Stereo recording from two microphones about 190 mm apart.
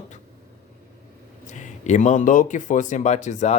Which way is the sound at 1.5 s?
40° left (ahead or behind).